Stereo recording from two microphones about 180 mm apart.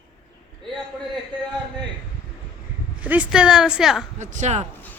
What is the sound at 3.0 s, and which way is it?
Speech, 5° right (ahead or behind).